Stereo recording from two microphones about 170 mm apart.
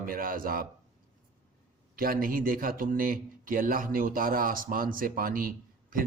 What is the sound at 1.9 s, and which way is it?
Speech, 55° right (ahead or behind).